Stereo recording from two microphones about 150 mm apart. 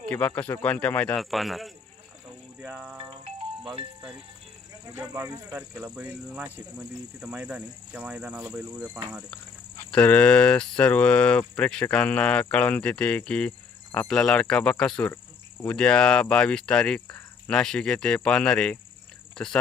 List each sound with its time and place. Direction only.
0.1 s speech: 10° left (ahead or behind)
2.6 s music: 10° right (ahead or behind)
4.9 s speech: 15° right (ahead or behind)
6.3 s speech: 5° right (ahead or behind)
9.9 s speech: 10° left (ahead or behind)